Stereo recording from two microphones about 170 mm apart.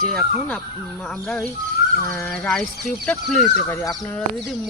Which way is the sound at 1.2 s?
Centre (ahead or behind).